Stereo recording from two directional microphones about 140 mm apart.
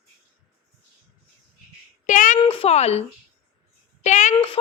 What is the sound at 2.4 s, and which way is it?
Speech, 45° left (ahead or behind).